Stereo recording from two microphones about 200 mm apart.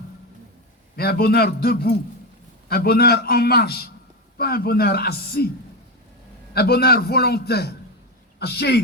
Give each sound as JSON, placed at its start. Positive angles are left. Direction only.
{"t": 0.9, "sound": "a man's voice", "side_deg": 50}
{"t": 6.5, "sound": "a man's voice", "side_deg": 50}